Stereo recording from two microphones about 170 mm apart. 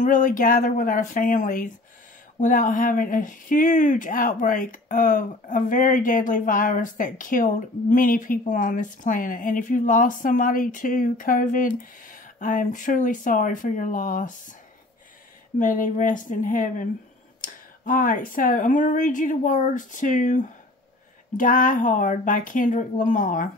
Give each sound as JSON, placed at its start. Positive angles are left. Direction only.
{"t": 0.0, "sound": "speech", "side_deg": 50}
{"t": 15.6, "sound": "speech", "side_deg": 50}